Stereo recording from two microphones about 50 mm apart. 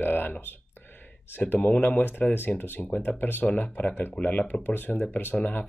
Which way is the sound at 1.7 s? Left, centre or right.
Left.